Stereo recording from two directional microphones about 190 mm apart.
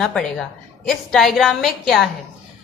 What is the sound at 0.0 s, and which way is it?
A woman's voice, centre (ahead or behind).